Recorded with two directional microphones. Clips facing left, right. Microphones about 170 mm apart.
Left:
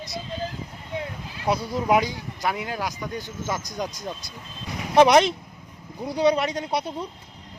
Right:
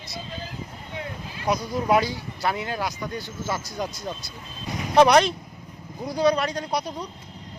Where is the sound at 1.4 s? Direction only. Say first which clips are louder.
Even; 25° left (ahead or behind).